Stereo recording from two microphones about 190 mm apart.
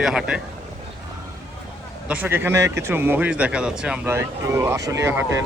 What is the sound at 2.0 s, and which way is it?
Speech, 10° right (ahead or behind).